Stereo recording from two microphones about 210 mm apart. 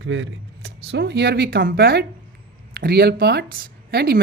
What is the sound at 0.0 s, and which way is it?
Speech, 65° right (ahead or behind).